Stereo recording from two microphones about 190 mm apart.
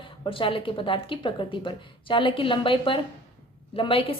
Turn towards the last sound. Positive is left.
turn(degrees=30)  # may be behind; listen again after turning